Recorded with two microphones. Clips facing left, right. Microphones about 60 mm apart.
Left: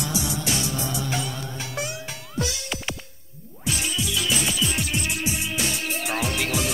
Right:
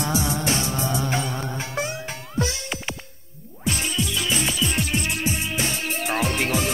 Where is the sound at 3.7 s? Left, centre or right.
Right.